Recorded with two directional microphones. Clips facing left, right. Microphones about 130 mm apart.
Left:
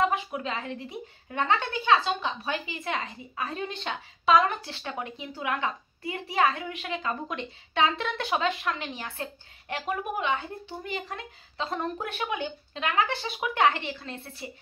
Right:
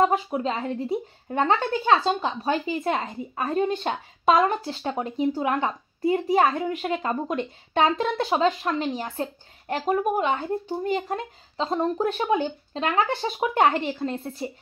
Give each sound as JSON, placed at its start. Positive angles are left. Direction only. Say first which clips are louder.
{"t": 0.0, "sound": "a woman's voice", "louder": "right 5 dB", "side_deg": -35}